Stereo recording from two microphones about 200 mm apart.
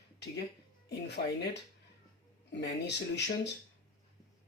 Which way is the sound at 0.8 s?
55° left (ahead or behind).